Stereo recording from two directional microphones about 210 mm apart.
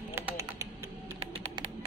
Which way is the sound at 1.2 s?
30° right (ahead or behind).